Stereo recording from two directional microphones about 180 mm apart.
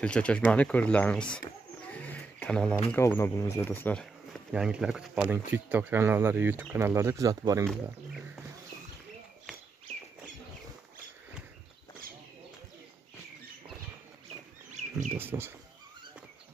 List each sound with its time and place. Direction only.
0.0 s speech: 5° left (ahead or behind)
1.9 s a sound: 5° left (ahead or behind)
2.9 s speech: 10° left (ahead or behind); by 7.6 s 20° right (ahead or behind)
14.7 s bird: 40° right (ahead or behind)
15.1 s speech: 10° right (ahead or behind)